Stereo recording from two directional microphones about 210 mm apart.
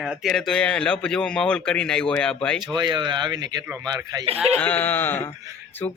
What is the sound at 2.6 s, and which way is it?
Speech, 20° right (ahead or behind).